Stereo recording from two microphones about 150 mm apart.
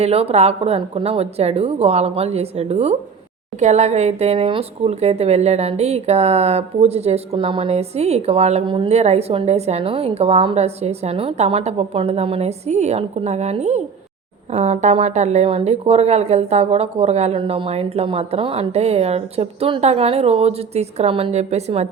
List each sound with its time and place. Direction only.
0.0 s a woman's voice: 40° right (ahead or behind)
7.3 s a woman's voice: 35° right (ahead or behind)
8.6 s a woman's voice: 35° right (ahead or behind)